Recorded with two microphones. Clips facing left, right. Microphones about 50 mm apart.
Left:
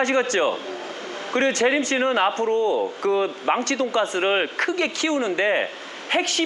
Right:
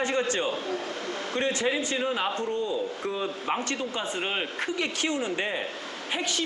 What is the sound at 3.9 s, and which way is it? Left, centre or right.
Speech, left.